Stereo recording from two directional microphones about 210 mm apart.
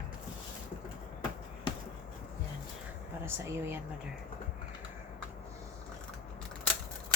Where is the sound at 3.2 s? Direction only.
10° right (ahead or behind).